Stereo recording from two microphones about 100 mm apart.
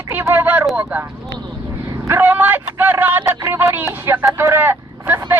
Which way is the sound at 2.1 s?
20° right (ahead or behind).